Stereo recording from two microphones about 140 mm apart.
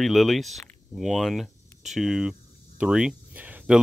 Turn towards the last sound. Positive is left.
turn(degrees=-10)  # may be behind; listen again after turning